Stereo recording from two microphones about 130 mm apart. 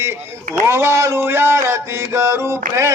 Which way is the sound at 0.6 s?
20° right (ahead or behind).